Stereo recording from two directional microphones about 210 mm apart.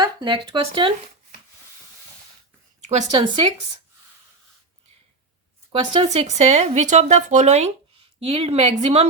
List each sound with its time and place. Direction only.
0.0 s speech: 20° right (ahead or behind)
2.8 s speech: 30° right (ahead or behind)
5.7 s speech: 25° right (ahead or behind)